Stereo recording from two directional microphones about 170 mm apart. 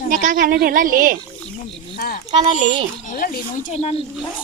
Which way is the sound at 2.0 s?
55° left (ahead or behind).